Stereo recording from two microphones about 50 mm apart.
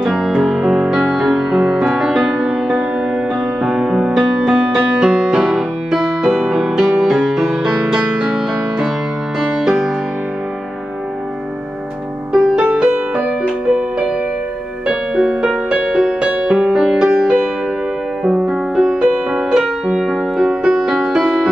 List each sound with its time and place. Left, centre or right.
0.0 s music: centre
12.3 s music: centre
16.2 s music: right